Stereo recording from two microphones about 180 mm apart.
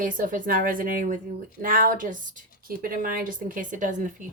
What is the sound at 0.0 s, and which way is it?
Speech, 50° right (ahead or behind).